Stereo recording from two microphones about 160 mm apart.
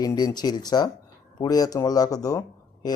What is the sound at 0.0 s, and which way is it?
A man's voice, 25° left (ahead or behind).